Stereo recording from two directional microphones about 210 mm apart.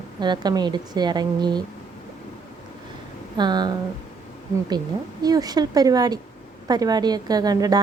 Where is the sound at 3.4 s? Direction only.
20° right (ahead or behind).